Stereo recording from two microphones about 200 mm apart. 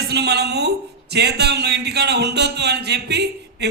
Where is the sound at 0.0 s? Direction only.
55° right (ahead or behind).